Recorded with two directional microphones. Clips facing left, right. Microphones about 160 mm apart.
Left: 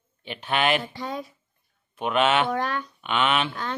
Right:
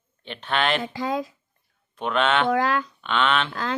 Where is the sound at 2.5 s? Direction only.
90° right.